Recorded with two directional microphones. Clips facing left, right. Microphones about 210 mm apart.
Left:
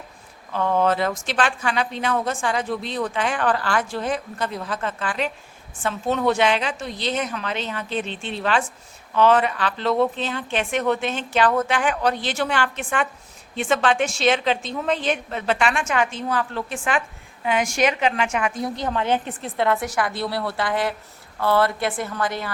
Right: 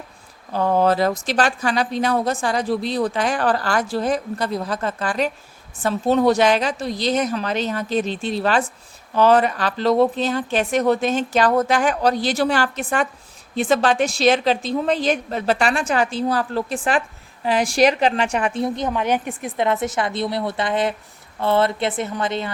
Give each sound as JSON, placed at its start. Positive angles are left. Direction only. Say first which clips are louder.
{"t": 0.5, "sound": "a woman's voice", "louder": "right 3 dB", "side_deg": -35}
{"t": 18.9, "sound": "a woman's voice", "louder": "right 1 dB", "side_deg": -15}